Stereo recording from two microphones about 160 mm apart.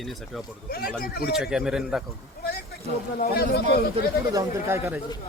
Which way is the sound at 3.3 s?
85° left.